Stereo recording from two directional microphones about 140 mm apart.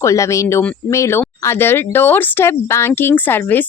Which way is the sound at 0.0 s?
20° left (ahead or behind).